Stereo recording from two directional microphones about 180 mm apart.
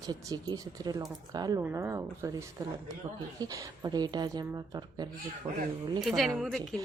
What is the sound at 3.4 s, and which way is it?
Speech, 20° right (ahead or behind).